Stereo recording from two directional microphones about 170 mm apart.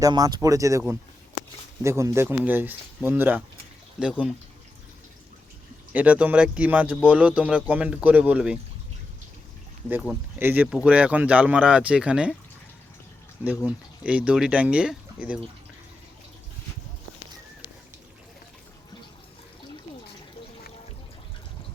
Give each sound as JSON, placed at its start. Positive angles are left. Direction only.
{"t": 0.0, "sound": "speech", "side_deg": -20}
{"t": 5.9, "sound": "speech", "side_deg": -10}
{"t": 9.9, "sound": "speech", "side_deg": -5}
{"t": 13.7, "sound": "speech", "side_deg": -10}